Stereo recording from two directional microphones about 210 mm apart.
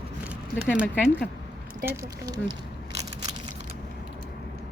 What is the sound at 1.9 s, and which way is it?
Speech, 15° right (ahead or behind).